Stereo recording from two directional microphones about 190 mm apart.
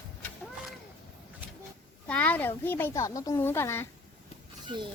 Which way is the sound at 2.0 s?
10° left (ahead or behind).